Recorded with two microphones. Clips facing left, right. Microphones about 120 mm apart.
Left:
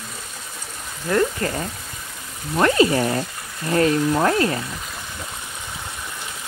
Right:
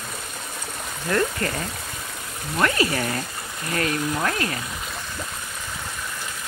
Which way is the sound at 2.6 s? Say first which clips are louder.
Left 6 dB; 25° left (ahead or behind).